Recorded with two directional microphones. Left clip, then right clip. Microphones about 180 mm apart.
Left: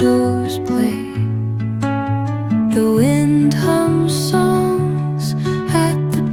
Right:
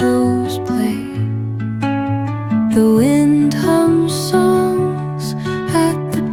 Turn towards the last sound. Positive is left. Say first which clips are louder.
# right 2 dB
turn(degrees=0)  # may be behind; listen again after turning